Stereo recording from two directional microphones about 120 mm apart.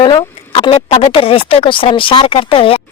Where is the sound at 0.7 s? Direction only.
60° left (ahead or behind).